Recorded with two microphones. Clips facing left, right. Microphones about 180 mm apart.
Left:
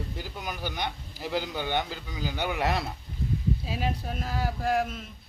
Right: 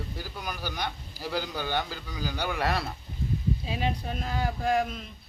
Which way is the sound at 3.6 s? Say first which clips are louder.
Right 1 dB; 5° left (ahead or behind).